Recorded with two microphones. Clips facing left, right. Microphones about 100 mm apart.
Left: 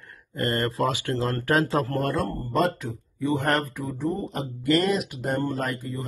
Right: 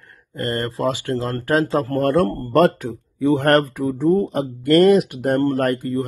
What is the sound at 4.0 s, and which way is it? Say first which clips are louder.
Speech: right 11 dB; 90° right.